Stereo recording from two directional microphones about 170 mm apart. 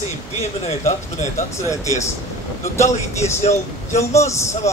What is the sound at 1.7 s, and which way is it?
Speech, 20° left (ahead or behind).